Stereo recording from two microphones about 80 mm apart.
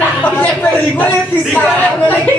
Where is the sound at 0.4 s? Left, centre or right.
Left.